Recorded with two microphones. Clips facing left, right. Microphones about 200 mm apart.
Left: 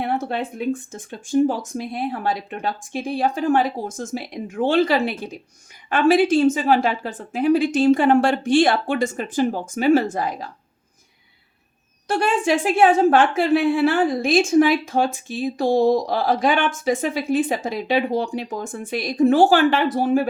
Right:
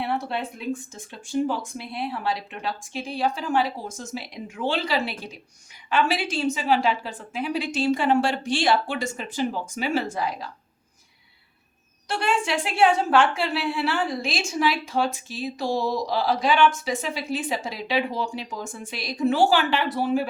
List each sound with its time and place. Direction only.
0.0 s a woman's voice: 50° left (ahead or behind)
12.0 s a woman's voice: 50° left (ahead or behind)